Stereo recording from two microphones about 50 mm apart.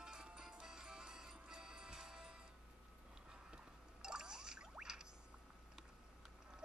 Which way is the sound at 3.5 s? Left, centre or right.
Centre.